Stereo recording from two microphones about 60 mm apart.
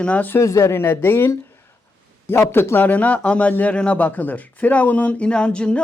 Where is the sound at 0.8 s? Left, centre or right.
Left.